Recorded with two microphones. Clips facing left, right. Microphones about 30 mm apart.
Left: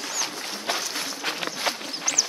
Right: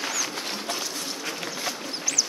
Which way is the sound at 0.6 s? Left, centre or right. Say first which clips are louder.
Left 3 dB; left.